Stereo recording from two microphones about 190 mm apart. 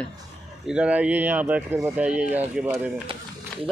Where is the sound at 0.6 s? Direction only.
5° right (ahead or behind).